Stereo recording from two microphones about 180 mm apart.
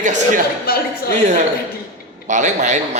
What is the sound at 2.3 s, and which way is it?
Speech, 45° right (ahead or behind).